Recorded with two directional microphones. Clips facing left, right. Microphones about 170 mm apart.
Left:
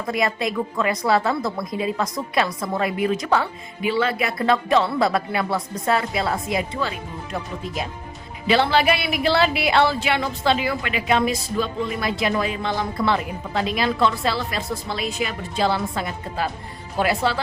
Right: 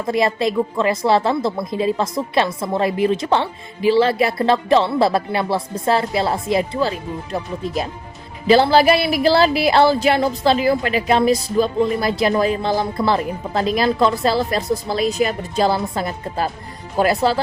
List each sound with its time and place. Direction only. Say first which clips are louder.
0.1 s a woman's voice: right 5 dB; 30° right (ahead or behind)
8.4 s speech: right 6 dB; 35° right (ahead or behind)